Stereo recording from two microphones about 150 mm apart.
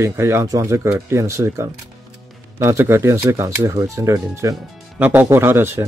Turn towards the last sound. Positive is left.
turn(degrees=-15)  # may be behind; listen again after turning